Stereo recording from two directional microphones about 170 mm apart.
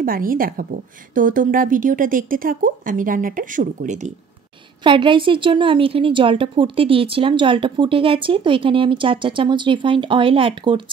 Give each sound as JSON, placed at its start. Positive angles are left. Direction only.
{"t": 0.0, "sound": "a woman's voice", "side_deg": -55}
{"t": 4.8, "sound": "a woman's voice", "side_deg": -30}